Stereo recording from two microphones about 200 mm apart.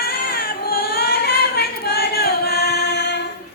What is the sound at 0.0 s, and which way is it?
Child singing, 50° left (ahead or behind).